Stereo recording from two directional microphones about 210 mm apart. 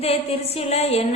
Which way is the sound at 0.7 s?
30° left (ahead or behind).